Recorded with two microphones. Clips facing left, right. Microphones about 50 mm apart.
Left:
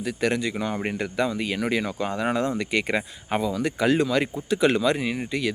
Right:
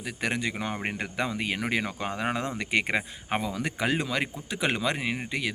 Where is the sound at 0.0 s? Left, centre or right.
Right.